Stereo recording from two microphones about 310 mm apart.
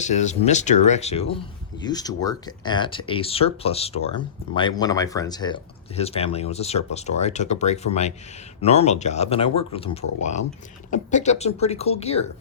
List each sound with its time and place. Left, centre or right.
0.0 s speech: left